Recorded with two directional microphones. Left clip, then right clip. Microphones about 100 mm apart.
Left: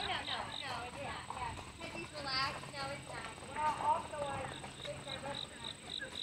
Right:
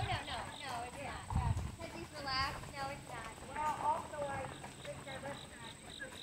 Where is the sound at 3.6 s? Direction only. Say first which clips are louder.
Left 2 dB; 20° left (ahead or behind).